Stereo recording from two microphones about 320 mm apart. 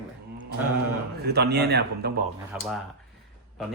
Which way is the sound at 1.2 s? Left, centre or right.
Right.